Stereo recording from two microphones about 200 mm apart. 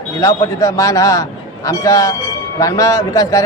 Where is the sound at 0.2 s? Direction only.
15° left (ahead or behind).